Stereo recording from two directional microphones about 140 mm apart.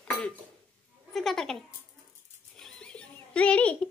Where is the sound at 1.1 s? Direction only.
Centre (ahead or behind).